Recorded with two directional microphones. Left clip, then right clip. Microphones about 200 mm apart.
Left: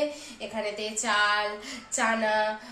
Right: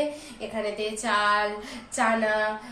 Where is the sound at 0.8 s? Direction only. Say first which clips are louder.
Right 1 dB; 15° left (ahead or behind).